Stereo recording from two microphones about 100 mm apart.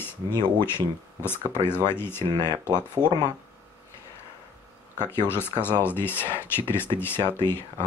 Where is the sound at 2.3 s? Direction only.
45° right (ahead or behind).